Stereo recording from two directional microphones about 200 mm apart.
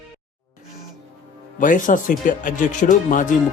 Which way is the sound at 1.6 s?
40° left (ahead or behind).